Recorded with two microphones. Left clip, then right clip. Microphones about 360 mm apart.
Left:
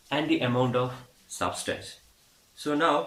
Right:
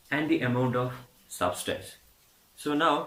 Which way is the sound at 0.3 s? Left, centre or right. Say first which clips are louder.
Left 2 dB; centre.